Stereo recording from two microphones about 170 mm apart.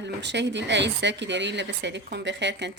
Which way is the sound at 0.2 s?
90° right.